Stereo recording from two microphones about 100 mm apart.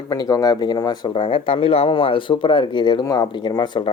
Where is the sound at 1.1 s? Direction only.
60° left (ahead or behind).